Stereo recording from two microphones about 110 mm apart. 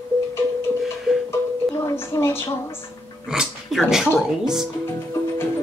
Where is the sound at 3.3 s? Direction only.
5° right (ahead or behind).